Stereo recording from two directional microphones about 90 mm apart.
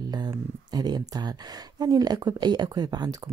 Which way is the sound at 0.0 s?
50° right (ahead or behind).